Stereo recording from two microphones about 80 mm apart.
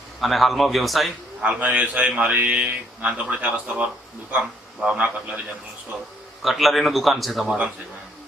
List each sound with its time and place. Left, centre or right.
0.2 s a man's voice: centre
1.4 s a man's voice: centre
6.4 s a man's voice: centre
7.4 s a man's voice: centre